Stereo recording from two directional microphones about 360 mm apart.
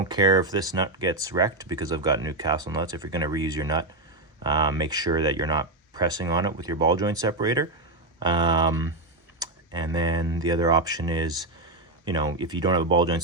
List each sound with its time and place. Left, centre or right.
0.1 s speech: centre